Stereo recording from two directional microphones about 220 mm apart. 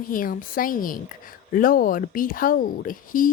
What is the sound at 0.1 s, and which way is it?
A woman's voice, 40° left (ahead or behind).